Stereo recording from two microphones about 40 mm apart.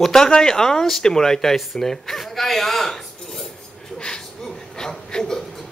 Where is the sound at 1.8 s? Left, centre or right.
Centre.